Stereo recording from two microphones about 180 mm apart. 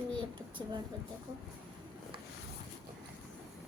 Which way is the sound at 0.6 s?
20° right (ahead or behind).